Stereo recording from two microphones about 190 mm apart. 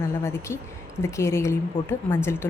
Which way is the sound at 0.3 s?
15° left (ahead or behind).